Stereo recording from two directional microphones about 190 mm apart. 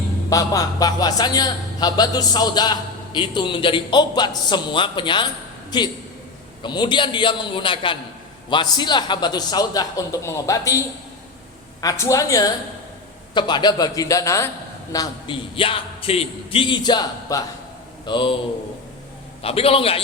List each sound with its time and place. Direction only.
0.3 s a man's voice: 20° left (ahead or behind)
19.4 s a man's voice: 30° left (ahead or behind)